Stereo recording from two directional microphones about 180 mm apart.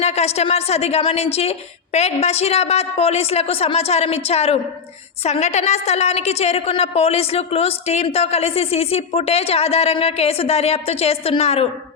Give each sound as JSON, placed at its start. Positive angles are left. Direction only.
{"t": 0.0, "sound": "a woman's voice", "side_deg": 35}